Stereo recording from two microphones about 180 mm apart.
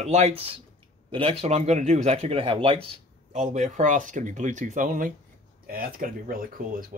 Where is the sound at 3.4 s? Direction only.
45° right (ahead or behind).